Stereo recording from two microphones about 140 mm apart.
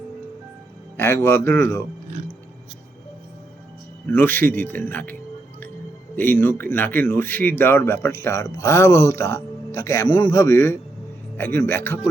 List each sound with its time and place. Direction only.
0.9 s speech: 20° left (ahead or behind)
4.1 s speech: 15° left (ahead or behind)
6.1 s speech: 15° left (ahead or behind)